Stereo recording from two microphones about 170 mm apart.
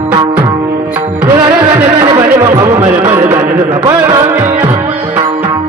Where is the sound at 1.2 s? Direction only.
25° right (ahead or behind).